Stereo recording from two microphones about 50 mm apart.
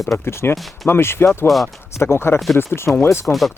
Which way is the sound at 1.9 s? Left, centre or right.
Left.